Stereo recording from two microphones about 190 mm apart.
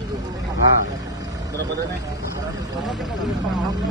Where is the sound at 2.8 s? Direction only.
Centre (ahead or behind).